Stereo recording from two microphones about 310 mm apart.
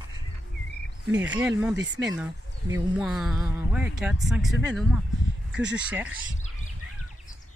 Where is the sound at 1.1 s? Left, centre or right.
Centre.